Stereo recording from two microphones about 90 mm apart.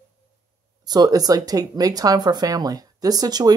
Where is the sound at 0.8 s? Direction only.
50° right (ahead or behind).